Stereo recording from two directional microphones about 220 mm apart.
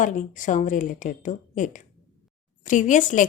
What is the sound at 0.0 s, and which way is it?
A woman's voice, 35° left (ahead or behind).